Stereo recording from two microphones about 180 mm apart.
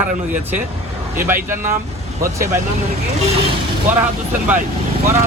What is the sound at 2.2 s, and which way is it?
Speech, 15° right (ahead or behind).